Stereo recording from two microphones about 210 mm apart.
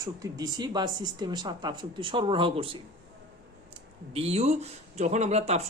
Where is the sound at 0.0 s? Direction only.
15° right (ahead or behind).